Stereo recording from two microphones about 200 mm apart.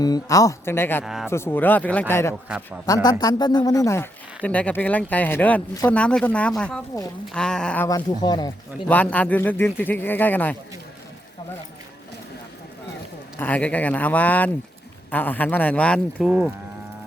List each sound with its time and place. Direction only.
0.0 s speech: 20° left (ahead or behind)
1.0 s speech: centre (ahead or behind)
1.3 s speech: 10° left (ahead or behind)
2.3 s speech: 5° right (ahead or behind)
2.8 s a man's voice: 20° left (ahead or behind)
7.9 s a man's voice: 20° left (ahead or behind)
8.9 s speech: 5° left (ahead or behind)
13.4 s speech: 5° left (ahead or behind)